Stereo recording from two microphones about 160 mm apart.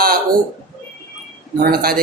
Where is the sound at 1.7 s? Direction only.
70° right (ahead or behind).